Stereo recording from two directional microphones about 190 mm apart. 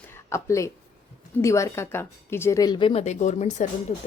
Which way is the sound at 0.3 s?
15° left (ahead or behind).